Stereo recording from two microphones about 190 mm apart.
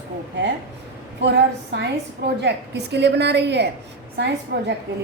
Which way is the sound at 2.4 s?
60° right (ahead or behind).